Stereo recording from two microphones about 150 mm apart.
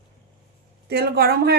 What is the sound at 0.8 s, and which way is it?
Speech, 90° right.